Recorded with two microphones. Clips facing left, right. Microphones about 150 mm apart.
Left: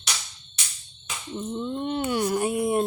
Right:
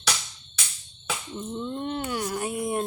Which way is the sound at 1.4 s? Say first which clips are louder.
Left 4 dB; 10° left (ahead or behind).